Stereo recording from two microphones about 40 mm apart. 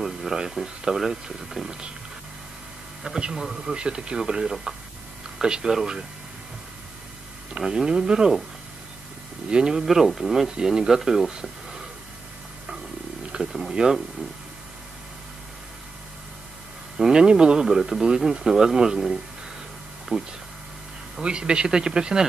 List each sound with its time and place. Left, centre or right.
0.0 s a sound: centre
0.9 s speech: centre
3.2 s speech: centre
7.6 s speech: centre
9.5 s speech: centre
9.8 s speech: centre
13.4 s speech: centre
17.1 s speech: centre
17.6 s speech: centre
20.1 s speech: right